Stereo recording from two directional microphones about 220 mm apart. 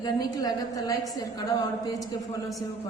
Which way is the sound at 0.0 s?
15° left (ahead or behind).